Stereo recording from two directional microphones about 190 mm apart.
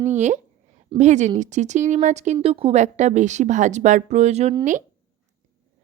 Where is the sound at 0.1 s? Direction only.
40° right (ahead or behind).